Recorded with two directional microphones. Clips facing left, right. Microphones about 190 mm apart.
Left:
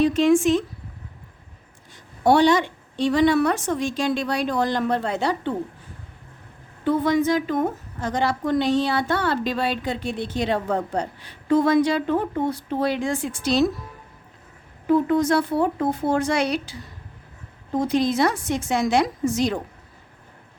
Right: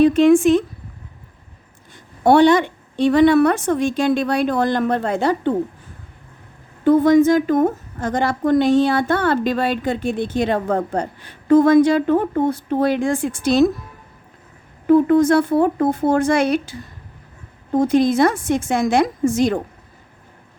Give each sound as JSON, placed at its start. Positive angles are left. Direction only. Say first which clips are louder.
{"t": 0.0, "sound": "a woman's voice", "louder": "right 5 dB", "side_deg": -55}
{"t": 2.2, "sound": "a woman's voice", "louder": "right 4 dB", "side_deg": -55}
{"t": 6.8, "sound": "a woman's voice", "louder": "right 8 dB", "side_deg": -50}
{"t": 14.8, "sound": "a woman's voice", "louder": "right 6 dB", "side_deg": -50}